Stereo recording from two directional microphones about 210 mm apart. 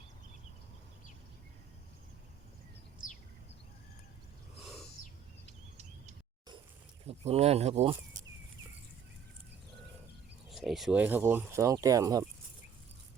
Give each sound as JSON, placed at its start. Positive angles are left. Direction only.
{"t": 7.1, "sound": "speech", "side_deg": -30}
{"t": 10.5, "sound": "speech", "side_deg": 0}